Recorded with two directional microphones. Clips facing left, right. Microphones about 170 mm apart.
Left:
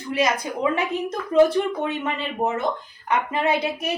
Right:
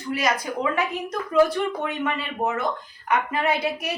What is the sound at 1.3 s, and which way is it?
A woman's voice, 25° left (ahead or behind).